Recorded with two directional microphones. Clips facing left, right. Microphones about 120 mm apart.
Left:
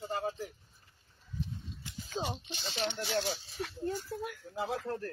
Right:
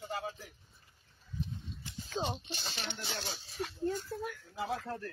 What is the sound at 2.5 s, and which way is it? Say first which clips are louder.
Speech: left 6 dB; 45° right (ahead or behind).